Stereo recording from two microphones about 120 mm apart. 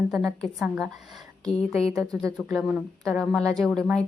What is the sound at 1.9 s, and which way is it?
Speech, 25° right (ahead or behind).